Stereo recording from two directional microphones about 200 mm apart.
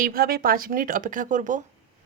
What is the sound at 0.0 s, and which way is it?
Speech, 45° right (ahead or behind).